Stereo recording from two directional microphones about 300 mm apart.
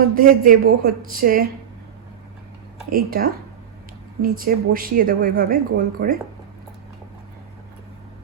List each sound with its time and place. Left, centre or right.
0.0 s speech: right
2.9 s speech: right